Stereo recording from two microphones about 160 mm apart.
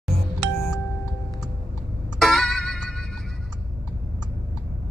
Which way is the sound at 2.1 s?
Centre (ahead or behind).